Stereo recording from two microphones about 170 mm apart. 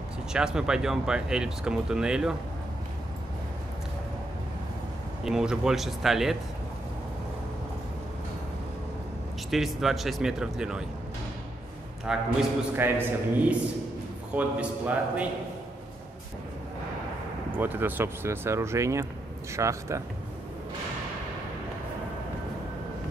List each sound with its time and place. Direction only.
0.3 s speech: 5° right (ahead or behind)
5.2 s speech: 5° right (ahead or behind)
9.5 s speech: centre (ahead or behind)
12.1 s speech: 5° right (ahead or behind)
17.5 s speech: 10° right (ahead or behind)